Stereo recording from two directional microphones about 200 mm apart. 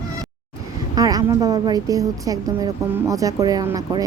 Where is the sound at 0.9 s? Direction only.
20° right (ahead or behind).